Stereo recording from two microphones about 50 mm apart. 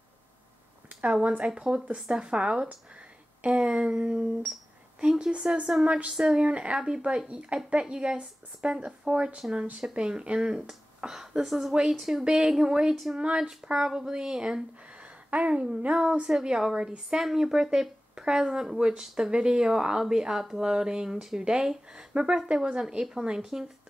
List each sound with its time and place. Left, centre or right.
1.4 s a woman's voice: centre
5.3 s a woman's voice: right
5.9 s a woman's voice: right; by 11.7 s centre
11.7 s speech: centre
13.2 s speech: centre
15.2 s a woman's voice: right; by 23.7 s centre